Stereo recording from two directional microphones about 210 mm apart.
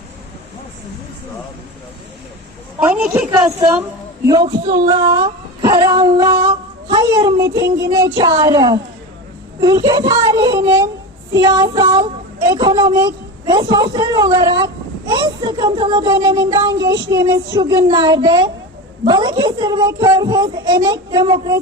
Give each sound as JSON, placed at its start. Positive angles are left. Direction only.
{"t": 2.8, "sound": "a woman's voice", "side_deg": -5}